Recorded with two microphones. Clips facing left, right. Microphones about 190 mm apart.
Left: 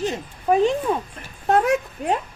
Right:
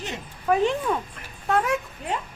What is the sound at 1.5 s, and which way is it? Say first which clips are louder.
Speech: left 5 dB; 45° left (ahead or behind).